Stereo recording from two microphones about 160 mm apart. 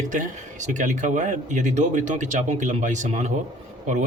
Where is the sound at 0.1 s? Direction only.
50° right (ahead or behind).